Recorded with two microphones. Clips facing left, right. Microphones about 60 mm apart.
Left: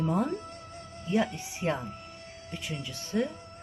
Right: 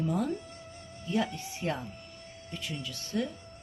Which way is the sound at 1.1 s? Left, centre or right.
Left.